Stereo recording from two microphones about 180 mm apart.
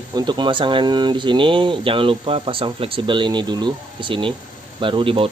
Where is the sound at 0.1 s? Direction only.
25° right (ahead or behind).